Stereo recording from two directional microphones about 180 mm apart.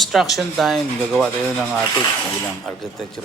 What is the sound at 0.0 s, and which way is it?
Speech, centre (ahead or behind).